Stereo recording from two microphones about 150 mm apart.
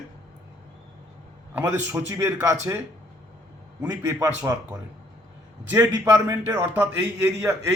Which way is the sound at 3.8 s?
20° right (ahead or behind).